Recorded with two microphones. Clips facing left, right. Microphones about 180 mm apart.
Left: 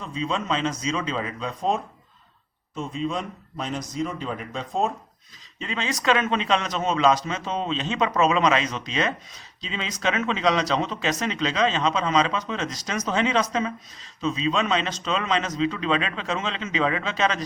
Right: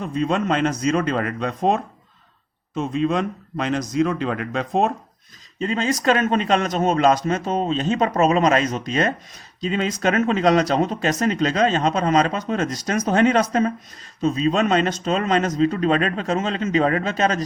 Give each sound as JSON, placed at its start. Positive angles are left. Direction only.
{"t": 0.0, "sound": "speech", "side_deg": -60}
{"t": 5.5, "sound": "speech", "side_deg": -45}